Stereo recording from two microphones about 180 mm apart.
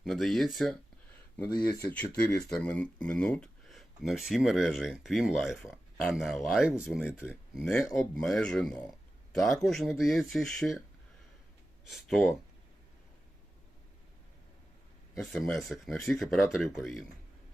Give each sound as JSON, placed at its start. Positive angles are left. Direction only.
{"t": 0.0, "sound": "speech", "side_deg": 0}
{"t": 1.5, "sound": "speech", "side_deg": 25}
{"t": 1.9, "sound": "speech", "side_deg": 10}
{"t": 11.9, "sound": "speech", "side_deg": 0}
{"t": 15.1, "sound": "speech", "side_deg": 0}